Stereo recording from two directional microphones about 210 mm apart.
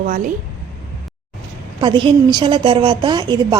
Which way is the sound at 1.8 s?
20° right (ahead or behind).